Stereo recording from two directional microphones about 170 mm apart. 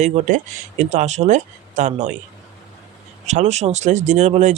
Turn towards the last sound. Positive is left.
turn(degrees=-45)  # may be behind; listen again after turning